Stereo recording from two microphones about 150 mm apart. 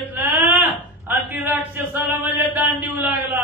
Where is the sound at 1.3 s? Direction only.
10° right (ahead or behind).